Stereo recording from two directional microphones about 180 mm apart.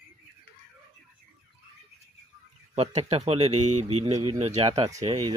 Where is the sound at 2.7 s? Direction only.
40° right (ahead or behind).